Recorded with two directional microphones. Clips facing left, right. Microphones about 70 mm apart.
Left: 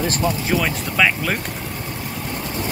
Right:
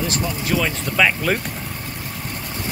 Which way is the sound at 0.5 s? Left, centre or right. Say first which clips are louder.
Even; centre.